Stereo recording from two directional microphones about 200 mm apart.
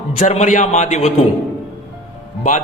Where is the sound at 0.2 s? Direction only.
35° left (ahead or behind).